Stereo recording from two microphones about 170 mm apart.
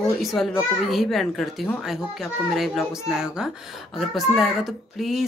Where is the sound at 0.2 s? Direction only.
Centre (ahead or behind).